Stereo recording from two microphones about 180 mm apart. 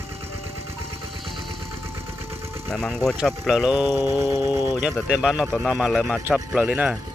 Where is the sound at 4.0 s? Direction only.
15° right (ahead or behind).